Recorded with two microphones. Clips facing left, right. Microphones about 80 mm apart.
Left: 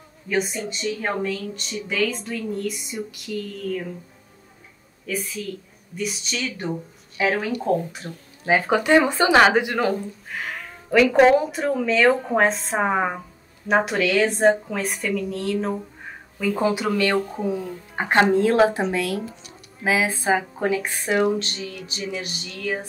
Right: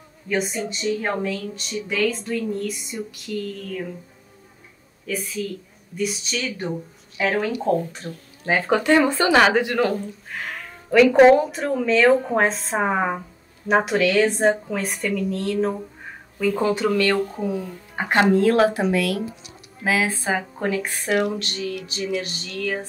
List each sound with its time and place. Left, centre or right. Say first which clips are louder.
0.3 s speech: even; centre
5.0 s speech: right 1 dB; centre
17.5 s speech: left 1 dB; left